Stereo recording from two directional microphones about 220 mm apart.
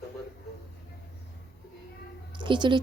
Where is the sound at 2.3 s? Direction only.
20° right (ahead or behind).